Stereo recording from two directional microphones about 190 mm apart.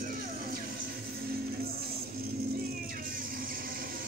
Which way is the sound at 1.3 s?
50° right (ahead or behind).